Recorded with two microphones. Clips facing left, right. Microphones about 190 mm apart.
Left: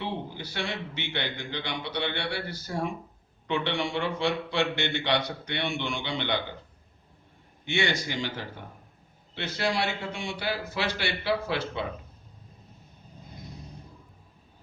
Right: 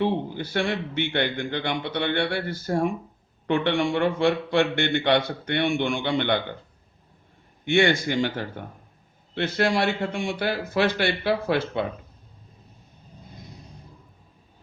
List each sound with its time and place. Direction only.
0.0 s a man's voice: 55° right (ahead or behind)
7.6 s a man's voice: 55° right (ahead or behind)